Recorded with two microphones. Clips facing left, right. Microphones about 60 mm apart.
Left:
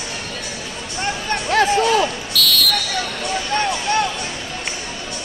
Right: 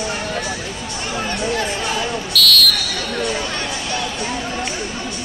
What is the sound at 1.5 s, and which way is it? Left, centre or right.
Music, left.